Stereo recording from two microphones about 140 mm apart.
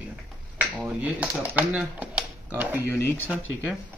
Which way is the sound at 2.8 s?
15° left (ahead or behind).